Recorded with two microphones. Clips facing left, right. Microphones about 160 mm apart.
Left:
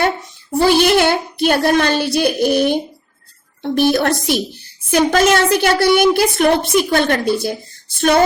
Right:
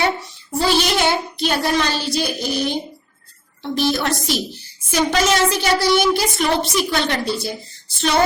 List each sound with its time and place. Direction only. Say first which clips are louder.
0.6 s a woman's voice: left 6 dB; 55° left (ahead or behind)